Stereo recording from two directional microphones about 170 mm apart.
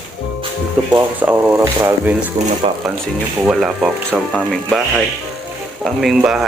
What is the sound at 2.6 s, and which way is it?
Speech, 35° right (ahead or behind).